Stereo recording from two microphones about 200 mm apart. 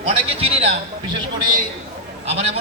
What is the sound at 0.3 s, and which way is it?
Speech, 30° right (ahead or behind).